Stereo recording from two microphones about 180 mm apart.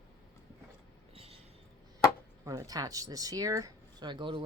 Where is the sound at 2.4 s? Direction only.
20° right (ahead or behind).